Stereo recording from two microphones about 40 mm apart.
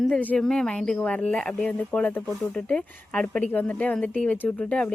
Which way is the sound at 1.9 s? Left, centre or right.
Left.